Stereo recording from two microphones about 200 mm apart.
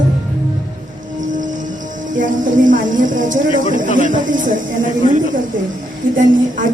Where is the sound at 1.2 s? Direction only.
40° right (ahead or behind).